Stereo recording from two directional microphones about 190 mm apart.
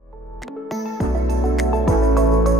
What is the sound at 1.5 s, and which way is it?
Music, centre (ahead or behind).